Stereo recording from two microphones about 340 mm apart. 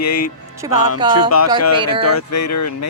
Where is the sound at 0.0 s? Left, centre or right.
Left.